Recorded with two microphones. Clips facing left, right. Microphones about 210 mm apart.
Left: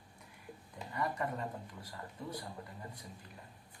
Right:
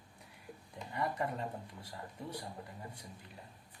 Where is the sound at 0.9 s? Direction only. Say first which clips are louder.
Right 1 dB; 25° right (ahead or behind).